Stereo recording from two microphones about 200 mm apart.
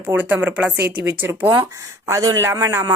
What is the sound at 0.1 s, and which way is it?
A woman's voice, 10° right (ahead or behind).